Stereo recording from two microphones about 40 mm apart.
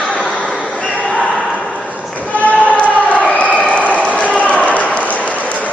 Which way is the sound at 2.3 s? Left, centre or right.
Left.